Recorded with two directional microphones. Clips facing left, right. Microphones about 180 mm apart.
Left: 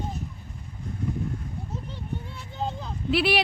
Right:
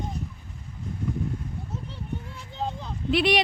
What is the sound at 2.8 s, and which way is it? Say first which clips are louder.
Speech: right 1 dB; 5° left (ahead or behind).